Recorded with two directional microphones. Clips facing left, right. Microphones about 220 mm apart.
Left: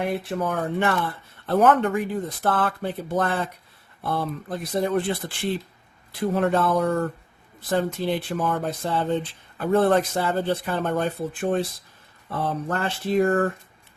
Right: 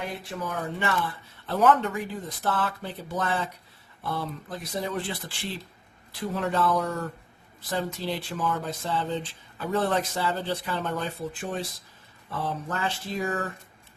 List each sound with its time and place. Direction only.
0.3 s speech: 55° left (ahead or behind)